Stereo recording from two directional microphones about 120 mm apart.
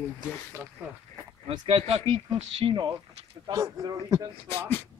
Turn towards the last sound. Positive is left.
turn(degrees=20)  # may be behind; listen again after turning